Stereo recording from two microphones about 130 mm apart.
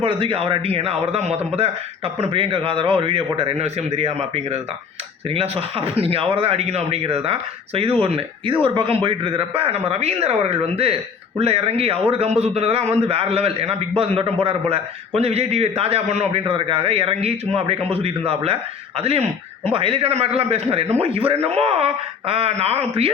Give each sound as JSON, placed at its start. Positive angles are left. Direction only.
{"t": 0.0, "sound": "speech", "side_deg": -45}
{"t": 16.5, "sound": "speech", "side_deg": -45}